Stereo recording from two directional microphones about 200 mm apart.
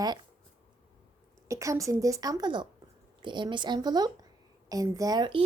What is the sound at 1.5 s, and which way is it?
A woman's voice, 15° right (ahead or behind).